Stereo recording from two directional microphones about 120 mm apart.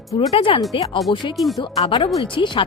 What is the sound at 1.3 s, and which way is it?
Speech, centre (ahead or behind).